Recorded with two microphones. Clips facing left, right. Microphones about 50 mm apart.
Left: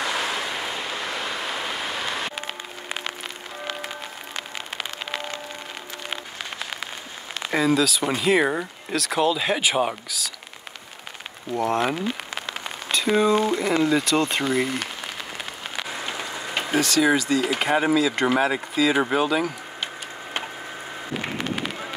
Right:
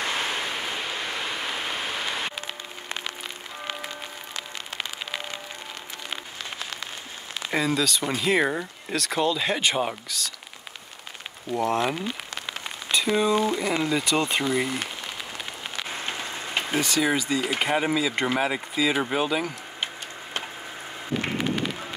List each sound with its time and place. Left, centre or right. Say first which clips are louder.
0.0 s a sound: left 2 dB; left
7.5 s speech: left 4 dB; centre
11.5 s speech: left 1 dB; centre
16.2 s a sound: left 1 dB; centre
17.0 s speech: left 6 dB; centre
21.4 s run: right 1 dB; centre